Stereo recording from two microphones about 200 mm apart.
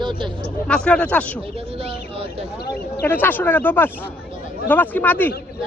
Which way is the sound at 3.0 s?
10° left (ahead or behind).